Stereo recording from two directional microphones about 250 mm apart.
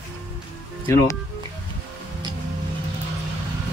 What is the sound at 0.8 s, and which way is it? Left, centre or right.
Speech, centre.